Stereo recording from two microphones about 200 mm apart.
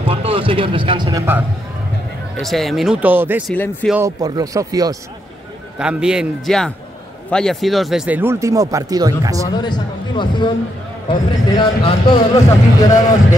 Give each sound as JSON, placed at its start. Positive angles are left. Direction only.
{"t": 0.0, "sound": "speech", "side_deg": -30}
{"t": 2.4, "sound": "speech", "side_deg": 0}
{"t": 3.5, "sound": "speech", "side_deg": 10}
{"t": 3.9, "sound": "speech", "side_deg": -15}
{"t": 5.8, "sound": "speech", "side_deg": -5}
{"t": 9.5, "sound": "a man's voice", "side_deg": 20}